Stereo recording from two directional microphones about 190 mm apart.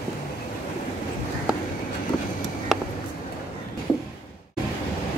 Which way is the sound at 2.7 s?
Centre (ahead or behind).